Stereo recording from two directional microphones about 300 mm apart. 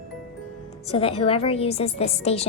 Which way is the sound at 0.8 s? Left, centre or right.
Centre.